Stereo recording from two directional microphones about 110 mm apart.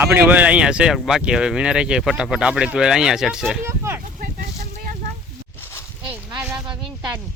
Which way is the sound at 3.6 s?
25° right (ahead or behind).